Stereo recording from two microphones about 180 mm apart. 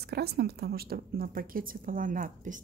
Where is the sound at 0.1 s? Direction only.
60° right (ahead or behind).